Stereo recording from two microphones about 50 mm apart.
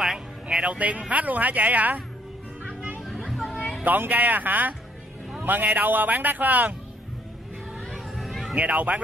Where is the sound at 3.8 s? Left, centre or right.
Right.